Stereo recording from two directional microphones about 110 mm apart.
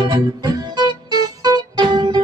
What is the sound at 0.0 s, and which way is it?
Music, 45° right (ahead or behind).